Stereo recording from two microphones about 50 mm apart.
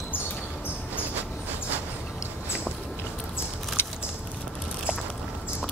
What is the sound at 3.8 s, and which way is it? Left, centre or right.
Keys jangling, left.